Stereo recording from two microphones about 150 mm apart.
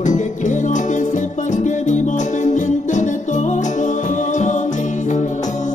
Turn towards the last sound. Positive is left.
turn(degrees=55)  # may be behind; listen again after turning